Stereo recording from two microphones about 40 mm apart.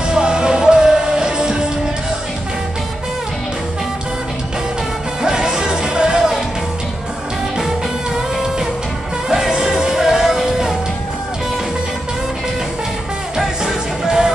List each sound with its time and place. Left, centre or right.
0.1 s music: centre
5.2 s music: centre
9.3 s music: centre
13.4 s music: centre